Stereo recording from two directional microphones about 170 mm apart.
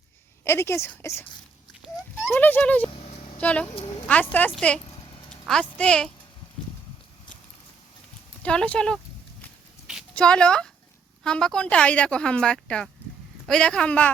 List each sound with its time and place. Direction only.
0.4 s a woman's voice: 15° left (ahead or behind)
2.3 s a woman's voice: 10° left (ahead or behind)
2.9 s a sound: 40° left (ahead or behind)
3.4 s a woman's voice: 10° left (ahead or behind)
8.4 s a woman's voice: 5° left (ahead or behind)
9.8 s a sound: 5° right (ahead or behind)
10.2 s speech: 5° left (ahead or behind)